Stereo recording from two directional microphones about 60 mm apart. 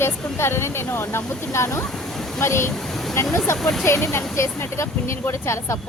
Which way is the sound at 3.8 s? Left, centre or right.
Left.